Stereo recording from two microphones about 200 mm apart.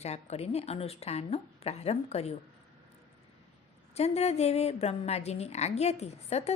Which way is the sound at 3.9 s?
30° left (ahead or behind).